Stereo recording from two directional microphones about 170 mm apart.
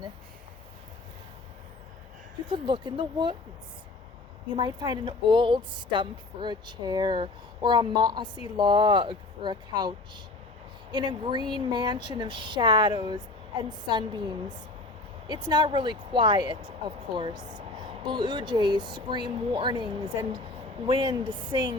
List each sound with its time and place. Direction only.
2.5 s a woman's voice: 30° right (ahead or behind)
4.5 s a woman's voice: 25° right (ahead or behind)
10.9 s a woman's voice: 25° right (ahead or behind)